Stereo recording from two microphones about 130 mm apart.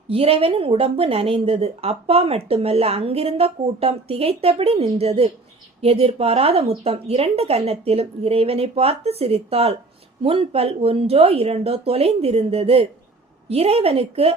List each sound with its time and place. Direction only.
0.1 s a woman's voice: 50° right (ahead or behind)